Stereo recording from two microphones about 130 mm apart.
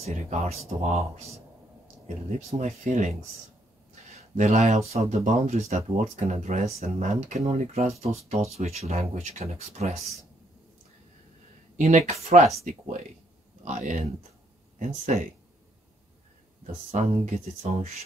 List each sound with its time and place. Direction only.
0.0 s speech: 70° right (ahead or behind)
2.2 s speech: 65° right (ahead or behind)
4.4 s speech: 65° right (ahead or behind)
11.7 s speech: 65° right (ahead or behind)
13.7 s speech: 70° right (ahead or behind)
16.9 s speech: 55° right (ahead or behind)